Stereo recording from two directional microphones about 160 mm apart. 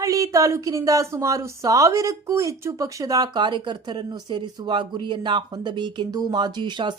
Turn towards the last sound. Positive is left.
turn(degrees=-30)  # may be behind; listen again after turning